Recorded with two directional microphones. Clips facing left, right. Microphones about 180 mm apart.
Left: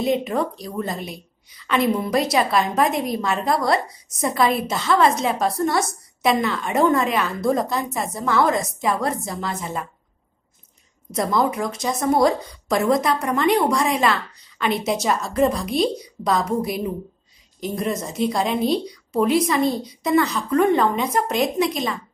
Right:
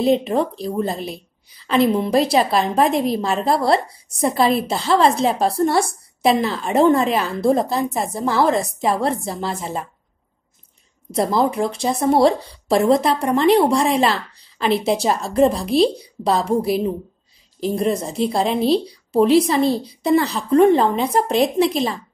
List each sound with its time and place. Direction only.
0.0 s a woman's voice: 30° right (ahead or behind)
11.1 s a woman's voice: 30° right (ahead or behind)